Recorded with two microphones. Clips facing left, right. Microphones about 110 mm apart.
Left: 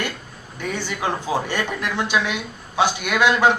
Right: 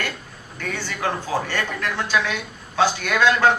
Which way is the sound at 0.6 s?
15° left (ahead or behind).